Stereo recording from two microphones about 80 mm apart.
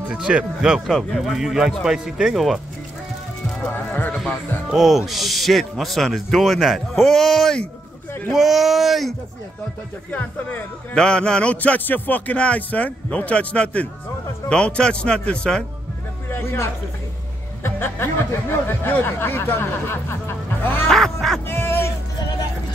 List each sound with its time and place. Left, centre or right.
0.1 s speech: centre
3.7 s speech: left
4.6 s speech: centre
11.0 s speech: centre
16.3 s a sound: left
17.6 s speech: left
20.8 s quack: centre
21.5 s music: left